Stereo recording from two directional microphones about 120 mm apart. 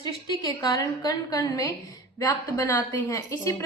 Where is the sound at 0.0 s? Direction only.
30° left (ahead or behind).